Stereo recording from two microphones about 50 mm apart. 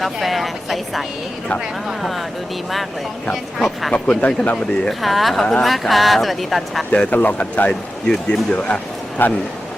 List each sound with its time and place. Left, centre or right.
0.0 s speech: centre
3.6 s speech: centre
3.9 s speech: left
4.5 s speech: centre
7.1 s speech: left
7.7 s speech: centre
9.2 s speech: left